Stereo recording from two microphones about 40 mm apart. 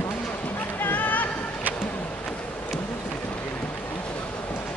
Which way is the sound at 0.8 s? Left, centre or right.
Left.